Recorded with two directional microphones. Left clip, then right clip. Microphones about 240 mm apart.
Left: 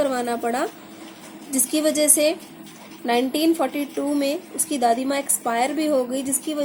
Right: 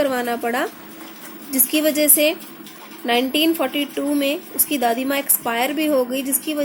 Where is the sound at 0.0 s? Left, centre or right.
Centre.